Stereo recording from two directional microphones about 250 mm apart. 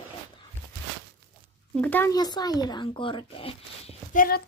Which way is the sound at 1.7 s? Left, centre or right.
Centre.